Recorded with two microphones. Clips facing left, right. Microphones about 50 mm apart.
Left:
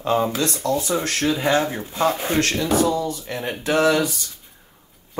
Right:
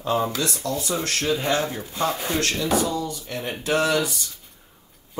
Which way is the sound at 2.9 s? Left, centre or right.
Left.